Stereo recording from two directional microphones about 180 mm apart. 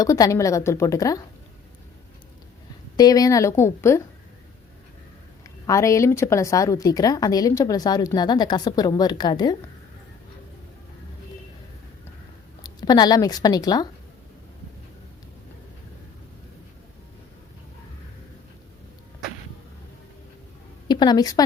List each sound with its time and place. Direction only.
0.0 s a woman's voice: 20° left (ahead or behind)
2.9 s a woman's voice: 20° left (ahead or behind)
5.6 s a woman's voice: 15° left (ahead or behind)
12.6 s speech: 20° left (ahead or behind)
20.8 s a woman's voice: 25° left (ahead or behind)